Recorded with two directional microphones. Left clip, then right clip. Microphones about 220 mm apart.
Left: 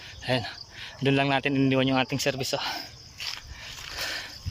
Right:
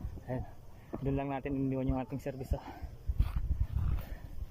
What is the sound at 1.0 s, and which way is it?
Speech, 55° left (ahead or behind).